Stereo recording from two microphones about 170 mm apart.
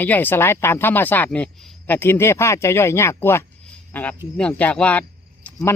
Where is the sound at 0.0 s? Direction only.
10° left (ahead or behind).